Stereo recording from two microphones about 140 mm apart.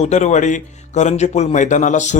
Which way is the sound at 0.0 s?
55° left (ahead or behind).